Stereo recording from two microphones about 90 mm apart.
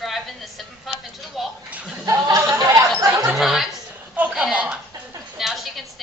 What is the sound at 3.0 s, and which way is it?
Chatter, 35° right (ahead or behind).